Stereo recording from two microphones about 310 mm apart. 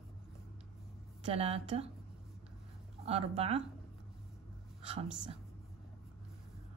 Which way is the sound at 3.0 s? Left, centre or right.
Centre.